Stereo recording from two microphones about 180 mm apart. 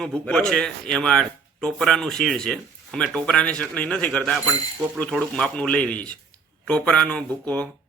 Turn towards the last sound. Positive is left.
turn(degrees=5)  # may be behind; listen again after turning